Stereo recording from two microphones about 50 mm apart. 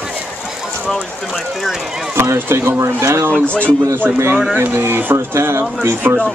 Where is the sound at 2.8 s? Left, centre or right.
Right.